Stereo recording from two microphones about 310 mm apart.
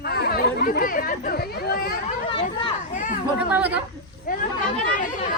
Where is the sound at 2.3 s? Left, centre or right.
Centre.